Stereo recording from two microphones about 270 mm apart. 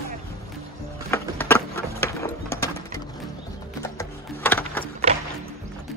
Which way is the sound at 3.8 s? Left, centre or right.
Centre.